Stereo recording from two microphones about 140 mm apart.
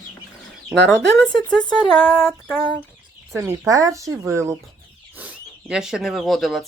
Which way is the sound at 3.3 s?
20° right (ahead or behind).